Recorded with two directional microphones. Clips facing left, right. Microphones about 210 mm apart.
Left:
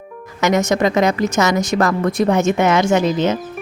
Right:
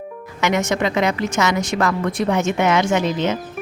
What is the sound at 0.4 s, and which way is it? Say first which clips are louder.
A woman's voice: left 4 dB; 40° left (ahead or behind).